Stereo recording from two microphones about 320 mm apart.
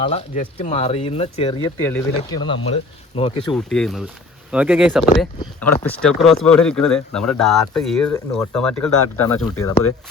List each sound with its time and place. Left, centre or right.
0.0 s speech: left
3.5 s speech: centre